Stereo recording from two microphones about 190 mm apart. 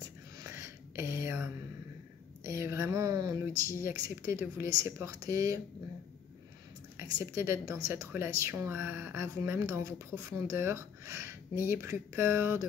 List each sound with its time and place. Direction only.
0.4 s a sound: 15° right (ahead or behind)
2.4 s speech: 15° right (ahead or behind)
7.0 s a woman's voice: 15° right (ahead or behind)